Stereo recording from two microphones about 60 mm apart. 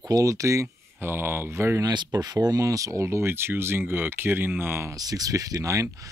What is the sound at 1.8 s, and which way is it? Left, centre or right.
Speech, right.